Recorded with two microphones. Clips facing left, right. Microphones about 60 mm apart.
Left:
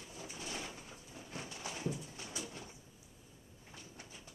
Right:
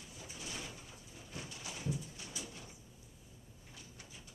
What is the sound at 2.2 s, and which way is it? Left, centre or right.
Bird, left.